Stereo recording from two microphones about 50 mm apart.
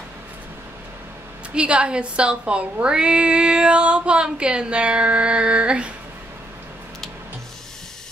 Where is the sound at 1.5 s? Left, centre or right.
Right.